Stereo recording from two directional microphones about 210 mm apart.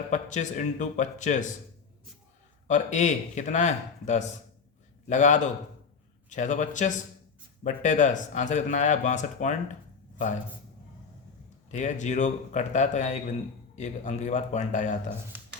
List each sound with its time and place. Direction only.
0.1 s speech: 35° left (ahead or behind)
2.6 s speech: 35° left (ahead or behind)
11.7 s speech: 35° left (ahead or behind)
15.3 s a sound: 10° right (ahead or behind)